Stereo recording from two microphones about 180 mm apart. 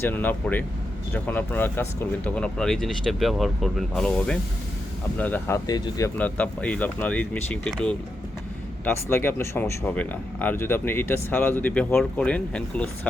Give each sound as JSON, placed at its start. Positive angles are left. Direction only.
{"t": 0.0, "sound": "speech", "side_deg": 10}
{"t": 6.1, "sound": "speech", "side_deg": 10}